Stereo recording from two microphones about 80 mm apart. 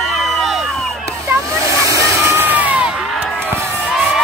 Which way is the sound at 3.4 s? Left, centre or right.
Right.